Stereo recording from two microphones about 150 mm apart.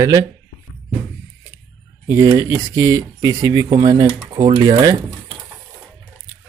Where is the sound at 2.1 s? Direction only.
20° right (ahead or behind).